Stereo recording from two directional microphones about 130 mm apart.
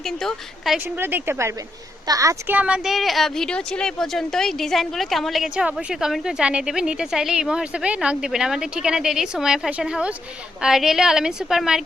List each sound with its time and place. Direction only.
0.0 s speech: 5° left (ahead or behind)
0.9 s speech: 15° right (ahead or behind)
2.5 s speech: 10° right (ahead or behind)